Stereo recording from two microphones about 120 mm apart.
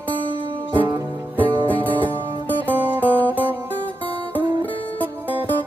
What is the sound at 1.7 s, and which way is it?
Music, 15° left (ahead or behind).